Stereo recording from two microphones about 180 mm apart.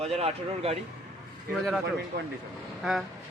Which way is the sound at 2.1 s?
55° right (ahead or behind).